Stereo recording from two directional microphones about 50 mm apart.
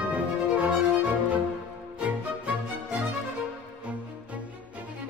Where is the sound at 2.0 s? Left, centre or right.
Right.